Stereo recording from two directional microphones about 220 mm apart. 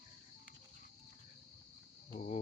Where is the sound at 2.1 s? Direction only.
35° left (ahead or behind).